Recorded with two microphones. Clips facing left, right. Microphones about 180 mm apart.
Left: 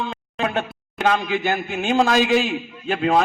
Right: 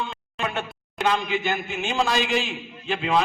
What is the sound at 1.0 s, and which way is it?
A man's voice, 45° left (ahead or behind).